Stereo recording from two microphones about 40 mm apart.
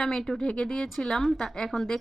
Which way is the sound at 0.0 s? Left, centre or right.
Centre.